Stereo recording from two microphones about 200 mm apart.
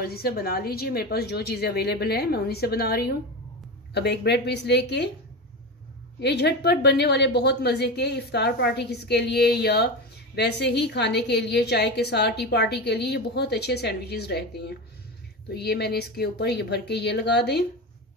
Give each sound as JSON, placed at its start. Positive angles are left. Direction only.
{"t": 0.0, "sound": "a woman's voice", "side_deg": 50}
{"t": 6.2, "sound": "a woman's voice", "side_deg": 55}